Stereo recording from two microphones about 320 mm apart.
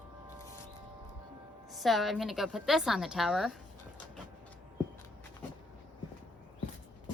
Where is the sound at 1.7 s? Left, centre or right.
Centre.